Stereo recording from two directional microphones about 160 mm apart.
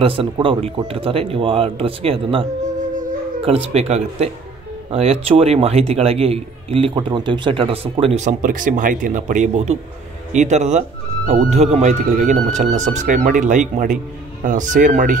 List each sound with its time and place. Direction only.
0.0 s a man's voice: 35° right (ahead or behind)
3.4 s a man's voice: 40° right (ahead or behind); by 15.1 s 55° right (ahead or behind)